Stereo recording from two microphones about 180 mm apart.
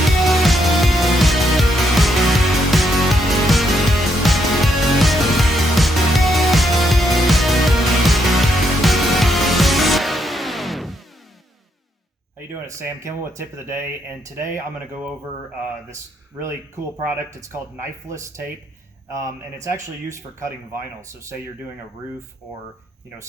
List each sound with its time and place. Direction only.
0.2 s music: centre (ahead or behind)
12.4 s speech: 15° right (ahead or behind)
16.4 s speech: 15° right (ahead or behind)